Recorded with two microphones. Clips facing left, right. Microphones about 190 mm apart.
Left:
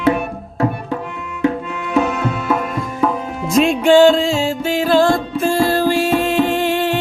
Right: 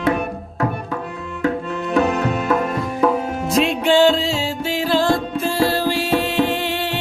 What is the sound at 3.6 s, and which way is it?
Music, 45° left (ahead or behind).